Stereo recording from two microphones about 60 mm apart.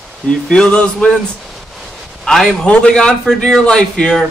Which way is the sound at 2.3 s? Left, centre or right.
Centre.